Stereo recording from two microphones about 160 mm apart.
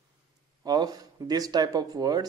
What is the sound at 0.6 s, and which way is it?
Speech, 25° right (ahead or behind).